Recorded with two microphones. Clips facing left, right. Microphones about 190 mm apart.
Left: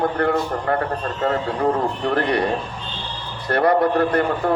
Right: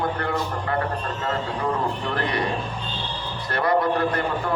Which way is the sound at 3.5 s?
55° left (ahead or behind).